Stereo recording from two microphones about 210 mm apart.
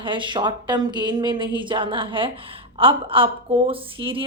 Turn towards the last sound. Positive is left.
turn(degrees=-25)  # may be behind; listen again after turning